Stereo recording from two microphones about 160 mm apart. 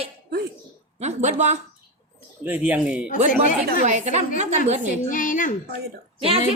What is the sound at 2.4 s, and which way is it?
Speech, 10° right (ahead or behind).